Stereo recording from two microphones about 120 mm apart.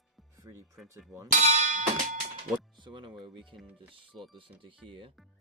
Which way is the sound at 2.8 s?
40° right (ahead or behind).